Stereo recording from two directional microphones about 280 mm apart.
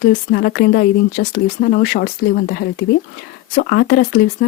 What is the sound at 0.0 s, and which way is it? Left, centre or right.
Speech, left.